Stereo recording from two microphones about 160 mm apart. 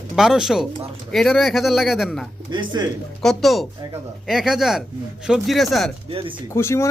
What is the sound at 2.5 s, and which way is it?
Speech, 30° right (ahead or behind).